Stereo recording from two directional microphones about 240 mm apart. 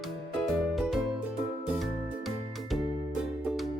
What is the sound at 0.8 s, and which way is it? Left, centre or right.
Music, centre.